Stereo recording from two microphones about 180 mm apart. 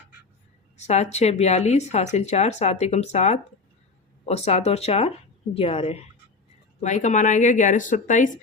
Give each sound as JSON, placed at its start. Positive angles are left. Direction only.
{"t": 0.8, "sound": "speech", "side_deg": 40}